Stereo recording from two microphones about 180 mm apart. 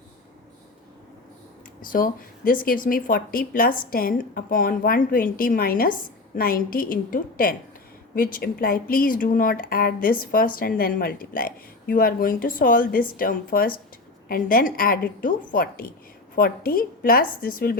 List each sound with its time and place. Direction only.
1.8 s speech: 50° left (ahead or behind)